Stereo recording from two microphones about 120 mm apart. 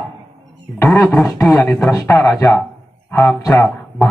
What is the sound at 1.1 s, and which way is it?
Speech, 10° left (ahead or behind).